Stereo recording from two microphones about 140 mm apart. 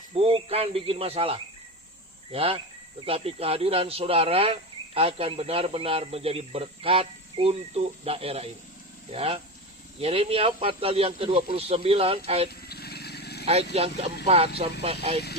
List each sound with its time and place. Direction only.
0.1 s speech: 40° right (ahead or behind)
12.5 s vehicle: 90° left
13.4 s speech: 50° right (ahead or behind)